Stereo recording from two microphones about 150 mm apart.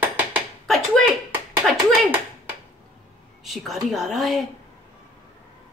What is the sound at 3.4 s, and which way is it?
A woman's voice, centre (ahead or behind).